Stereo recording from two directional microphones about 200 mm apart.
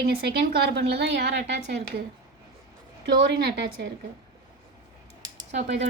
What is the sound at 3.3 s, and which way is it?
Speech, 55° right (ahead or behind).